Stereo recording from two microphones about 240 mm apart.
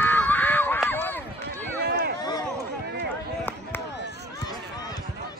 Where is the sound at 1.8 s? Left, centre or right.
Right.